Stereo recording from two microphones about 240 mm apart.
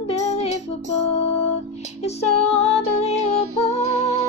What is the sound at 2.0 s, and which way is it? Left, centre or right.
Music, left.